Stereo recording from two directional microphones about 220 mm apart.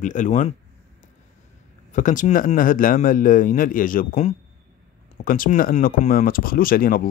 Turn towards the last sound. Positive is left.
turn(degrees=40)  # may be behind; listen again after turning